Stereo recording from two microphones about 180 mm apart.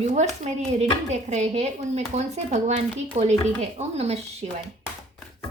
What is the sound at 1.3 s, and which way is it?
Speech, 40° right (ahead or behind).